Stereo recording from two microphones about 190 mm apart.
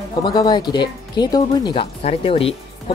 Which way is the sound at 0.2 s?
20° left (ahead or behind).